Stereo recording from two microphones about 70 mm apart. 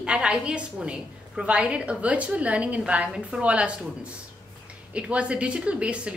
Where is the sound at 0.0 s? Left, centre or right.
Centre.